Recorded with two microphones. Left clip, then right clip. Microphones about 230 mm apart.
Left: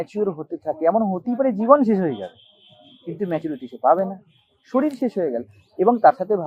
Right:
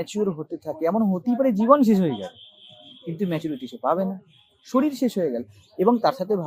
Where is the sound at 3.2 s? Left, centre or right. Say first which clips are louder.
Left 3 dB; right.